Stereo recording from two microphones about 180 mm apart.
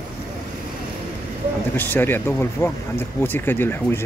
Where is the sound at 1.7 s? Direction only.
10° left (ahead or behind).